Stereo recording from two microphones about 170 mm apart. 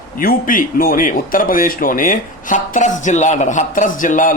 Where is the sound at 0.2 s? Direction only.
55° left (ahead or behind).